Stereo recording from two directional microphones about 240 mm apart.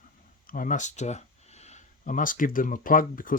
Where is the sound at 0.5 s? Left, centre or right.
Left.